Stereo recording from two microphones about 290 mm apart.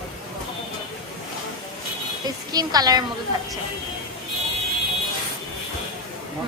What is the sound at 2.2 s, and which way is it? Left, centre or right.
Speech, centre.